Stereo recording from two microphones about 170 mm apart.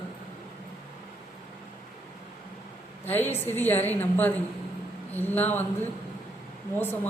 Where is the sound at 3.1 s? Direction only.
10° left (ahead or behind).